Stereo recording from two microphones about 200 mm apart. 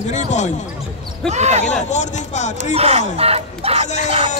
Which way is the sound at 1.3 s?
35° right (ahead or behind).